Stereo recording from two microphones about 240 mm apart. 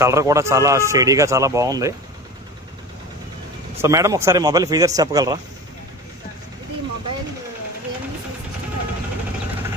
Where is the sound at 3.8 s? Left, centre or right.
Centre.